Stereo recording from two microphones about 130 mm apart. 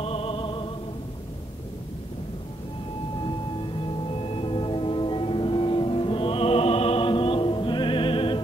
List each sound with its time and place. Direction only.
0.0 s music: 50° left (ahead or behind)
3.2 s music: 40° left (ahead or behind)